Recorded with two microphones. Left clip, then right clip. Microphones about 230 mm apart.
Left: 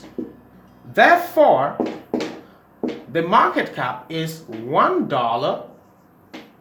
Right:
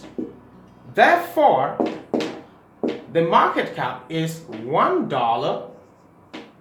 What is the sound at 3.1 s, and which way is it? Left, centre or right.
Speech, left.